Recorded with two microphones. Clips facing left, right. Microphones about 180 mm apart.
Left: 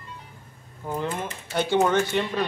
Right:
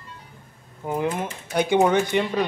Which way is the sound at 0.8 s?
15° right (ahead or behind).